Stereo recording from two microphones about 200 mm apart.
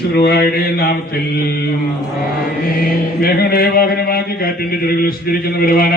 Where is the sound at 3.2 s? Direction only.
50° left (ahead or behind).